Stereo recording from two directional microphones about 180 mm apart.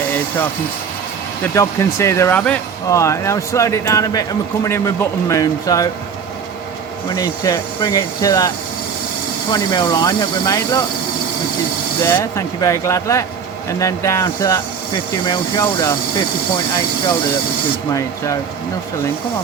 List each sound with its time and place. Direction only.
1.4 s speech: 15° left (ahead or behind)
7.1 s speech: 20° left (ahead or behind)
12.0 s speech: 15° left (ahead or behind)